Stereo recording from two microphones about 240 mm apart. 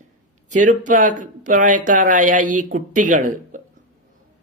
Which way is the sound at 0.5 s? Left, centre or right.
Right.